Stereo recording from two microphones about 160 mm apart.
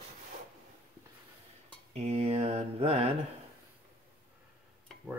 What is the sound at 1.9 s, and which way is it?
Mantra, 40° right (ahead or behind).